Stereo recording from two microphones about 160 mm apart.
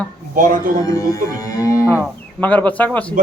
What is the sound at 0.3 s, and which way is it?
Speech, 60° right (ahead or behind).